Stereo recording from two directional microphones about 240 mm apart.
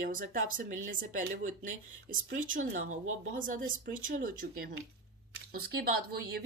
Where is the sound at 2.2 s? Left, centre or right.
Right.